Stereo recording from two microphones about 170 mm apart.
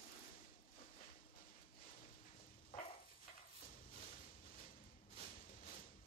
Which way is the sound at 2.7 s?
35° left (ahead or behind).